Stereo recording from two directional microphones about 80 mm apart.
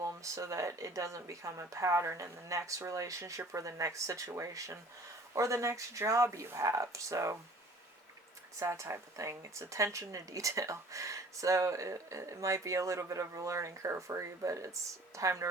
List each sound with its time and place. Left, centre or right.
0.0 s speech: right
8.5 s speech: right